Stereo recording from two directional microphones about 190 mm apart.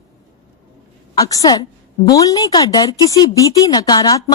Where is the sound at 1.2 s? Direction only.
20° left (ahead or behind).